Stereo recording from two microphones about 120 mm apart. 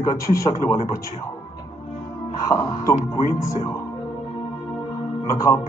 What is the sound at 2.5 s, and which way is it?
Speech, 25° left (ahead or behind).